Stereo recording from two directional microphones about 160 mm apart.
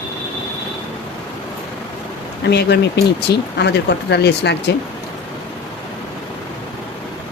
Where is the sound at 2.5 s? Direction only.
90° left.